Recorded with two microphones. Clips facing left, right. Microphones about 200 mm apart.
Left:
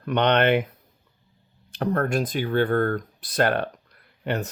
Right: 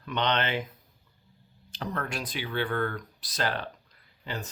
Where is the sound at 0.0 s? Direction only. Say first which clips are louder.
Left 8 dB; 60° left (ahead or behind).